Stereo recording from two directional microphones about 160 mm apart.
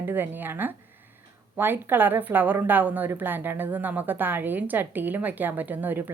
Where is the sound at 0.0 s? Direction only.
10° right (ahead or behind).